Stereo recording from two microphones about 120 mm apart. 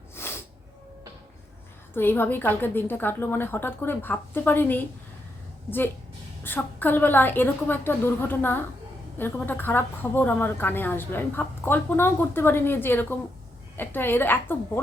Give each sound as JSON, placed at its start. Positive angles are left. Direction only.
{"t": 0.2, "sound": "music", "side_deg": 20}
{"t": 1.9, "sound": "a woman's voice", "side_deg": 20}
{"t": 6.4, "sound": "a woman's voice", "side_deg": 15}